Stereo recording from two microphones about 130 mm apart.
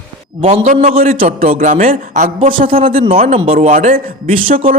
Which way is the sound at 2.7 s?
45° right (ahead or behind).